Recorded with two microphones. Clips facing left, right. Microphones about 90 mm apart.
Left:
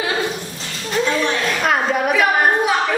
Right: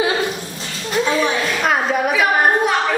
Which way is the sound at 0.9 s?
5° right (ahead or behind).